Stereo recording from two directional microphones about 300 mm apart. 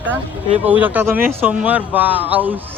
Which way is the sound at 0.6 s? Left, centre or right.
Centre.